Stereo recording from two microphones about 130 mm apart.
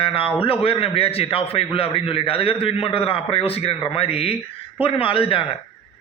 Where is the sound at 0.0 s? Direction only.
45° left (ahead or behind).